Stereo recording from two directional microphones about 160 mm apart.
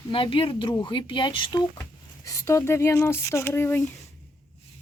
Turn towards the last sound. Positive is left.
turn(degrees=15)  # may be behind; listen again after turning